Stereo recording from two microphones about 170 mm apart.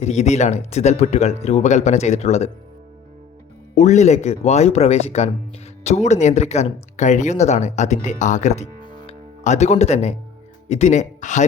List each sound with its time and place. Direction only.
0.0 s speech: 40° left (ahead or behind)
3.8 s speech: 45° left (ahead or behind)